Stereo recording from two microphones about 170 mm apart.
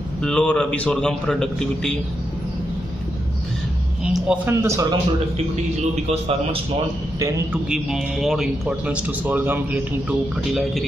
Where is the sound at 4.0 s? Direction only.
5° right (ahead or behind).